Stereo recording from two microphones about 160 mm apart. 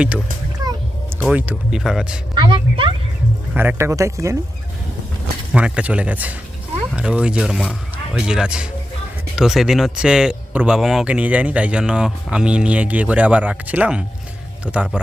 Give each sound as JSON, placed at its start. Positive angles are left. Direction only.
{"t": 0.6, "sound": "children playing", "side_deg": -25}
{"t": 1.2, "sound": "speech", "side_deg": -10}
{"t": 2.3, "sound": "a woman's voice", "side_deg": -30}
{"t": 3.5, "sound": "a man's voice", "side_deg": -10}
{"t": 5.5, "sound": "a man's voice", "side_deg": -10}